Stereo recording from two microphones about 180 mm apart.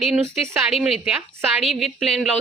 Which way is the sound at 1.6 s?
Centre (ahead or behind).